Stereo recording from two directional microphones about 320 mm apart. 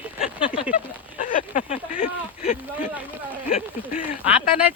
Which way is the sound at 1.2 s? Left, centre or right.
Left.